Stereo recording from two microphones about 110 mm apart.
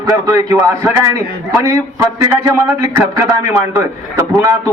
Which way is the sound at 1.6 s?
30° right (ahead or behind).